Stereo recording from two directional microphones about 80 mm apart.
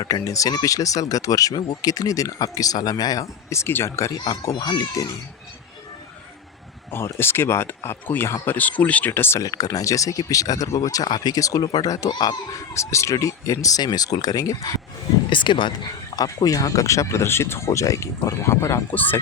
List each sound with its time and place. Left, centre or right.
0.0 s speech: left
3.5 s speech: left
4.5 s speech: left
6.9 s speech: left
9.4 s speech: left
12.1 s speech: left
12.5 s speech: left
15.3 s speech: left
16.1 s speech: left
18.9 s speech: left